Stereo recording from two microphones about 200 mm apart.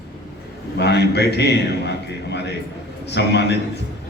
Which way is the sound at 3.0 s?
60° left (ahead or behind).